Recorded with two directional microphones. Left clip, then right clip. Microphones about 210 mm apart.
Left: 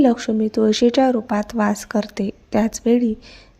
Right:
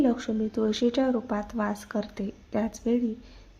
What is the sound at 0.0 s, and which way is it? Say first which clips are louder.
A woman's voice: left 9 dB; 25° left (ahead or behind).